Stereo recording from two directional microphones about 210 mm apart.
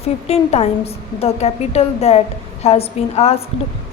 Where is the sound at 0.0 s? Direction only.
30° left (ahead or behind).